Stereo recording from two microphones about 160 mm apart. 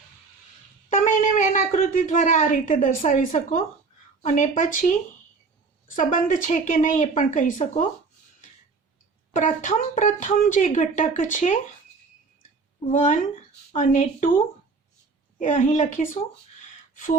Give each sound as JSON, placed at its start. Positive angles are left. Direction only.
{"t": 0.9, "sound": "a sound", "side_deg": 55}
{"t": 4.2, "sound": "speech", "side_deg": 50}
{"t": 9.3, "sound": "speech", "side_deg": 50}
{"t": 12.9, "sound": "speech", "side_deg": 55}
{"t": 15.4, "sound": "speech", "side_deg": 50}